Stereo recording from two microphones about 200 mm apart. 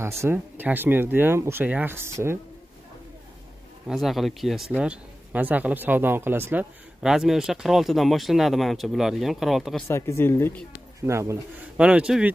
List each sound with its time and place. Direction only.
0.0 s speech: 15° right (ahead or behind)
3.8 s speech: centre (ahead or behind)
9.8 s speech: 15° left (ahead or behind)
11.0 s speech: 15° right (ahead or behind)